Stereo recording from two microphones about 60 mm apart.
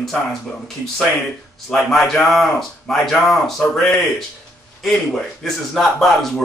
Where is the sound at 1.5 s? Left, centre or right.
Centre.